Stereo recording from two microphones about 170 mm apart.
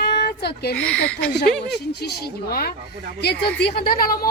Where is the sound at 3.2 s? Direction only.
75° left (ahead or behind).